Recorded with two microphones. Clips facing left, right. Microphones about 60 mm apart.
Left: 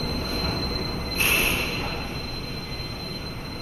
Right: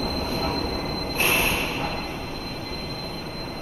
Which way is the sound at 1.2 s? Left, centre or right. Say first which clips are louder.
Right 1 dB; right.